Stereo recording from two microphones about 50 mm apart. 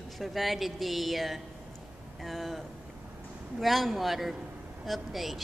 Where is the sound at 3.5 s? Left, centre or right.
Centre.